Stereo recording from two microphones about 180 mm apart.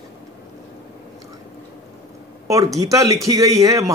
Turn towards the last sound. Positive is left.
turn(degrees=-20)  # may be behind; listen again after turning